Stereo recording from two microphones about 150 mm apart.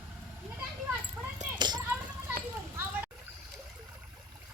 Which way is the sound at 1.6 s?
30° right (ahead or behind).